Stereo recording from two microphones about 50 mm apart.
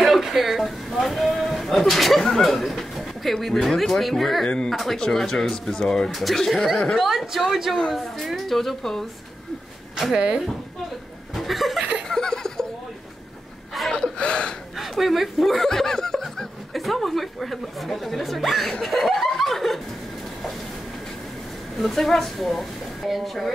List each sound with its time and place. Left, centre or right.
0.1 s a sound: centre
3.6 s speech: centre
9.9 s speech: centre
11.3 s chuckle: centre
12.1 s laughter: centre
13.9 s gasp: centre
14.8 s speech: centre
21.7 s speech: centre